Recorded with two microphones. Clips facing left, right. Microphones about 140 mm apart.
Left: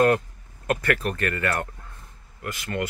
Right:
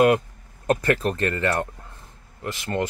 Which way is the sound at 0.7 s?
30° right (ahead or behind).